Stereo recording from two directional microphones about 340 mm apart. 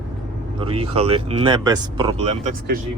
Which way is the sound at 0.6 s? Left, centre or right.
Centre.